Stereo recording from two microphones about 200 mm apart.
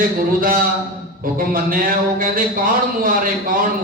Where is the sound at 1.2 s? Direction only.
45° right (ahead or behind).